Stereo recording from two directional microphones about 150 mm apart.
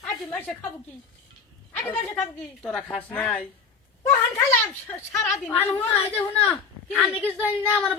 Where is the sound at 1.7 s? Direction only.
10° left (ahead or behind).